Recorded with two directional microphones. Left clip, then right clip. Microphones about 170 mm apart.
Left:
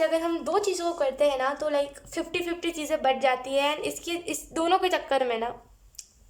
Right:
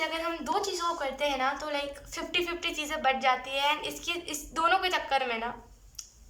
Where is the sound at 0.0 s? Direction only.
50° left (ahead or behind).